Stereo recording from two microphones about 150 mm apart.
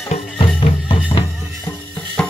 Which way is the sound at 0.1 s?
35° left (ahead or behind).